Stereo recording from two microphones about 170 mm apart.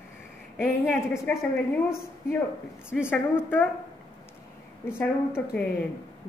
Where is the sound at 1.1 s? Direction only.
15° left (ahead or behind).